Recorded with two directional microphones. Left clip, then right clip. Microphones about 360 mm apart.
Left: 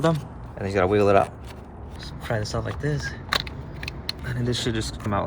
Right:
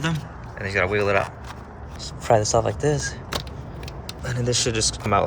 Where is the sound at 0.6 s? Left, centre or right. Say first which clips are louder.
Left 1 dB; centre.